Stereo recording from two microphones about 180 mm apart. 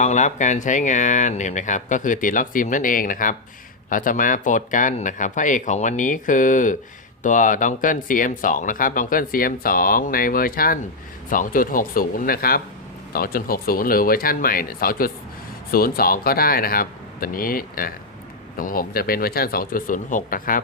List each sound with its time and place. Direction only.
0.0 s speech: 40° left (ahead or behind)